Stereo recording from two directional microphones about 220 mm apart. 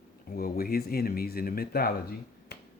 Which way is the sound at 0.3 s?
40° left (ahead or behind).